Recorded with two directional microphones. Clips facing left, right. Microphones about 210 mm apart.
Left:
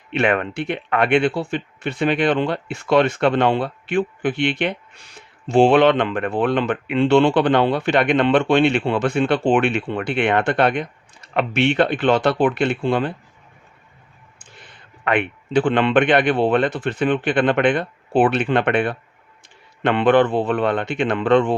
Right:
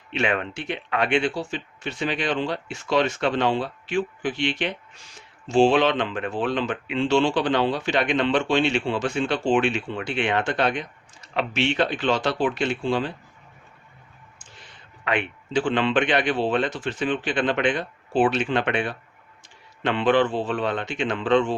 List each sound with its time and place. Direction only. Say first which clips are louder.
0.1 s speech: left 5 dB; 60° left (ahead or behind)
14.3 s speech: left 5 dB; 60° left (ahead or behind)